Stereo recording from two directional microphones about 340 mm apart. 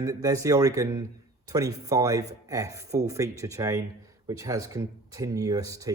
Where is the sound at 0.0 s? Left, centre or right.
Centre.